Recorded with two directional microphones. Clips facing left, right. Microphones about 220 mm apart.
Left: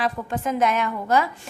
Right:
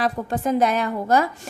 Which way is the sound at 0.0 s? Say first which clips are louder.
Right 3 dB; 35° right (ahead or behind).